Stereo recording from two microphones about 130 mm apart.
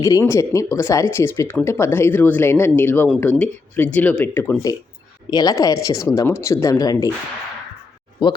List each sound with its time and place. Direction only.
0.0 s speech: 25° left (ahead or behind)
5.3 s speech: 30° left (ahead or behind)
8.2 s speech: 35° left (ahead or behind)